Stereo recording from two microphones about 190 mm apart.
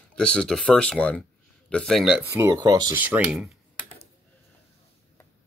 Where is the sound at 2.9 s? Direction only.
10° right (ahead or behind).